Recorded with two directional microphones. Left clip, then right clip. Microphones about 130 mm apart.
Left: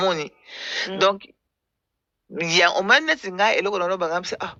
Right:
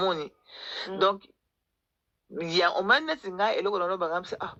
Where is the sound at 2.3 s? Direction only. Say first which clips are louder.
Left 7 dB; 75° left (ahead or behind).